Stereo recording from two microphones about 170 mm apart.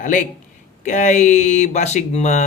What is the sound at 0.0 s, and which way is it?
Speech, 50° left (ahead or behind).